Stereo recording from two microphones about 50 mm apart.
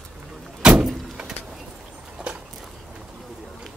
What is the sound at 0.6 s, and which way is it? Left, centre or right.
Vehicle, right.